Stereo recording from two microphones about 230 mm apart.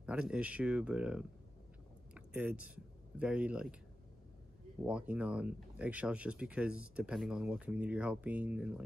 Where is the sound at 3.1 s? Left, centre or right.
Centre.